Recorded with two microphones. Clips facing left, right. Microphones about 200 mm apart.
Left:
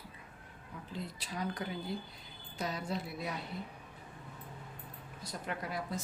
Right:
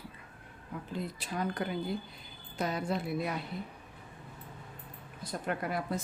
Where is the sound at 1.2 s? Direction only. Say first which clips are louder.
Right 4 dB; 55° right (ahead or behind).